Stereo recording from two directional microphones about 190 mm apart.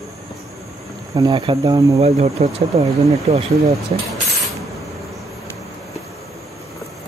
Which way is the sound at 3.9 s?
35° right (ahead or behind).